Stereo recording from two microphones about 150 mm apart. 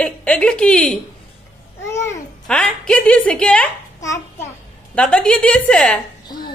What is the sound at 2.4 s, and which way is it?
Speech, 5° left (ahead or behind).